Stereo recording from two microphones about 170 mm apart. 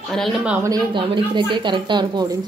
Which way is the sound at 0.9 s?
30° right (ahead or behind).